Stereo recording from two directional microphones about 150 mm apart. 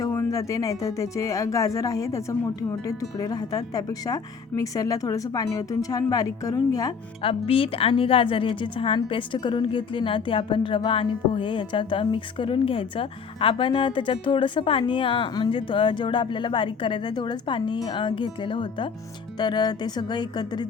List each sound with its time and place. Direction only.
0.0 s speech: 20° left (ahead or behind)
7.2 s speech: 40° left (ahead or behind)